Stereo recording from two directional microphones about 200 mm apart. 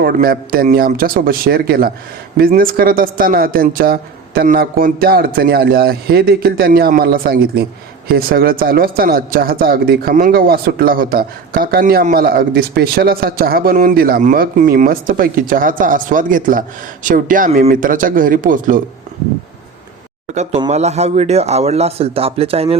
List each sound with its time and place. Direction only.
0.0 s speech: 50° right (ahead or behind)
20.3 s a man's voice: 35° right (ahead or behind)